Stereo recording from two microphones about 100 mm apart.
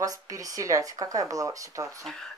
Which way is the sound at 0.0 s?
35° right (ahead or behind).